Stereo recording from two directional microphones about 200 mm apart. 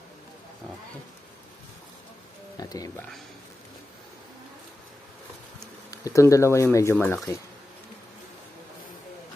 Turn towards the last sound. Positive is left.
turn(degrees=10)  # may be behind; listen again after turning